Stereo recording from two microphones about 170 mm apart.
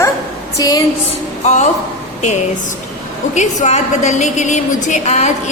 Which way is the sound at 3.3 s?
45° left (ahead or behind).